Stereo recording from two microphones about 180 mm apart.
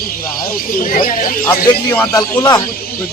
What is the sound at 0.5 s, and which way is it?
Speech, 50° left (ahead or behind).